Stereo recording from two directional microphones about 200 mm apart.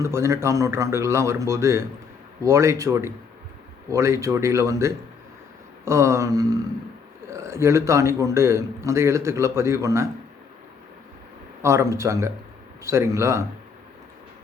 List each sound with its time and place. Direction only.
0.0 s a man's voice: 15° right (ahead or behind)
11.6 s a man's voice: 15° right (ahead or behind)